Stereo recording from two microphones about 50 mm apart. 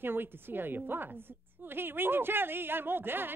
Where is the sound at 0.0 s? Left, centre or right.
Right.